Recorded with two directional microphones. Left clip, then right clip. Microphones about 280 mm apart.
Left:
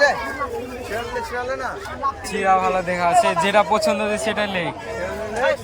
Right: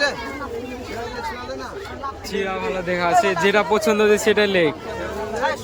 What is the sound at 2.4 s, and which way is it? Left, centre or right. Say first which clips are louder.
A man's voice: left 8 dB; centre.